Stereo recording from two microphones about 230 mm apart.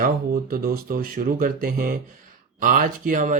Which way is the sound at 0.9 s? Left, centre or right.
Right.